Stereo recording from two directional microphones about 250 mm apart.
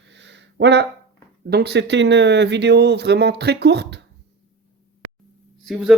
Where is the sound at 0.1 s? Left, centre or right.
Right.